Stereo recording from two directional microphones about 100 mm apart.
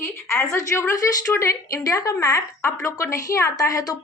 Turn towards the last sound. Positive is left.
turn(degrees=35)  # may be behind; listen again after turning